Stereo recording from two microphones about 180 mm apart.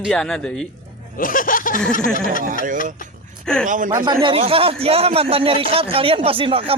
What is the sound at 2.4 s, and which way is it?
Speech, 50° right (ahead or behind).